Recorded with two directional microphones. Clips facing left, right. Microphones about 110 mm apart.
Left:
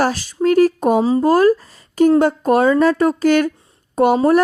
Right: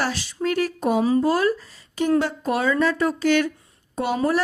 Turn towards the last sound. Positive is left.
turn(degrees=50)  # may be behind; listen again after turning